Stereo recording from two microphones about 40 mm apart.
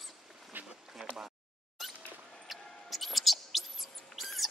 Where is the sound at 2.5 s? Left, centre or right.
Centre.